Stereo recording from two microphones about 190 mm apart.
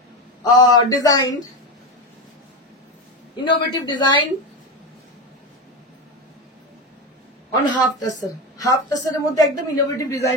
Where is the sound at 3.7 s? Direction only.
20° left (ahead or behind).